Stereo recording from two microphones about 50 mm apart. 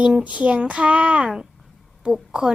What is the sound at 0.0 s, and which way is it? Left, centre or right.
A woman's voice, right.